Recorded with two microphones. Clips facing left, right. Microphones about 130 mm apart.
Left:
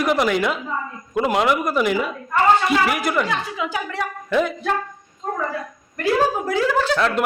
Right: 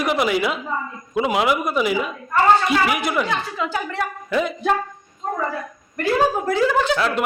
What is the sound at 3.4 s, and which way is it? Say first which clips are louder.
Speech: right 1 dB; 10° left (ahead or behind).